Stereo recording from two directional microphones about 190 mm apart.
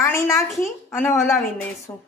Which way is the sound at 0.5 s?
Centre (ahead or behind).